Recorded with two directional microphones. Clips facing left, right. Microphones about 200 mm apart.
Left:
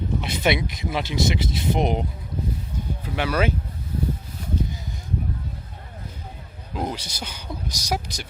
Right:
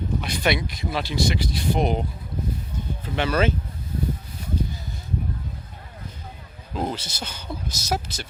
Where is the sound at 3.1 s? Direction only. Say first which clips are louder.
Right 1 dB; 10° left (ahead or behind).